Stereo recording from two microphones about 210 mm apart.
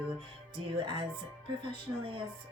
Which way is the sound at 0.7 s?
25° right (ahead or behind).